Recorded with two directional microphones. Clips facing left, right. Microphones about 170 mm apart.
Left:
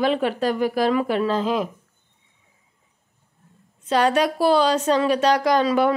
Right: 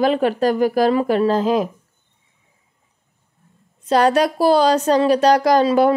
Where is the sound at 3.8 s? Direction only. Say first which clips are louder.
Right 4 dB; 40° right (ahead or behind).